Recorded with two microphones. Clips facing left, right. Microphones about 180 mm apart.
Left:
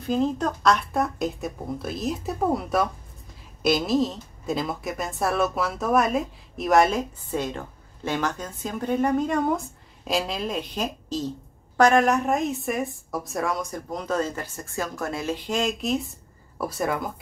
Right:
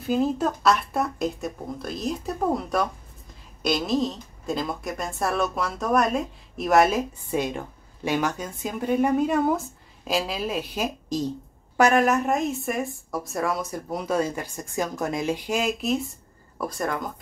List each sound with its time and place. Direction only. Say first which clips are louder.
0.0 s speech: right 1 dB; 5° right (ahead or behind)